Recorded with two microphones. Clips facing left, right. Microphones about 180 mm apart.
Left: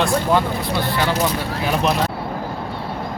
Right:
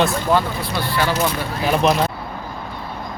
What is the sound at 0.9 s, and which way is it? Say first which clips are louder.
Speech: right 2 dB; 20° left (ahead or behind).